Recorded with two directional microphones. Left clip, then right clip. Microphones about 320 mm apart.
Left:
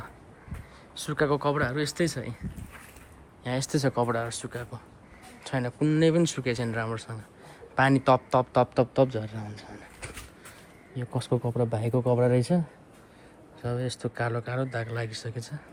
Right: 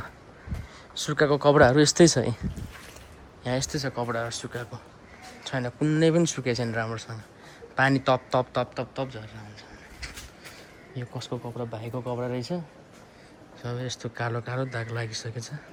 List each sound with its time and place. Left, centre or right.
0.9 s speech: centre
3.4 s speech: centre
11.3 s speech: left
12.2 s speech: centre
13.6 s speech: centre